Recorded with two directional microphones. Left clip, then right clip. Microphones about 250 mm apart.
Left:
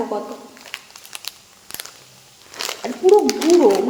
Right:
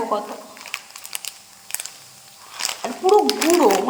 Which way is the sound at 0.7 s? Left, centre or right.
Centre.